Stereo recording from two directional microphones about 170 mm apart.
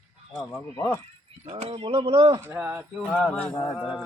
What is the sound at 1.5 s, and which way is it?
Speech, 40° right (ahead or behind).